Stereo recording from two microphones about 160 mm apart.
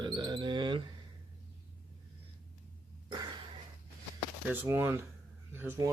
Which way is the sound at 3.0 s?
30° right (ahead or behind).